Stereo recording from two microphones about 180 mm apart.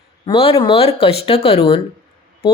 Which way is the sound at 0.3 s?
30° left (ahead or behind).